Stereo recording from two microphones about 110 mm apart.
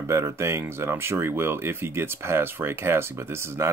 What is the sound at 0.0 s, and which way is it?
Speech, 25° right (ahead or behind).